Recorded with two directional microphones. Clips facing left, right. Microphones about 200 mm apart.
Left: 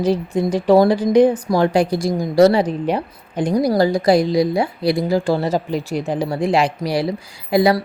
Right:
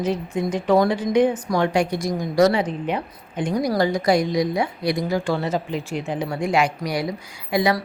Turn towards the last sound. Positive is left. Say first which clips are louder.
# left 5 dB
turn(degrees=35)  # may be behind; listen again after turning